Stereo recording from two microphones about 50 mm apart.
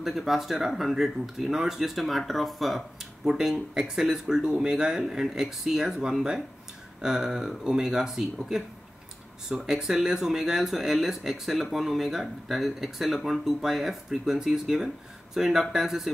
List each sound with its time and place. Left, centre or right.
0.0 s speech: centre
3.3 s speech: centre